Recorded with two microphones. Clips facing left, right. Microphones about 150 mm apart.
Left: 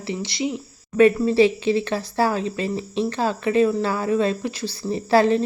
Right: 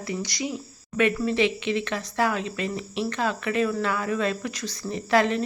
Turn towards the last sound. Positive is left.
turn(degrees=35)  # may be behind; listen again after turning